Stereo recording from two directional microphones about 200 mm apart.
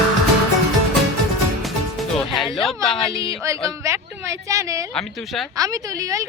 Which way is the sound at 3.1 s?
15° right (ahead or behind).